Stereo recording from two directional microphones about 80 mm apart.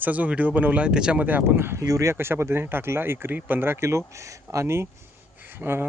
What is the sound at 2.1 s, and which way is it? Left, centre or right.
Speech, right.